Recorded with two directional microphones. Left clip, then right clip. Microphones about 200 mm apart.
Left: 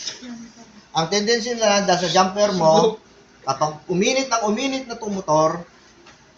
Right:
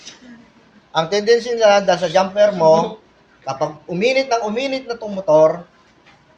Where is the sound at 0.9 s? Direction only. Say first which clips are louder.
Right 5 dB; 50° right (ahead or behind).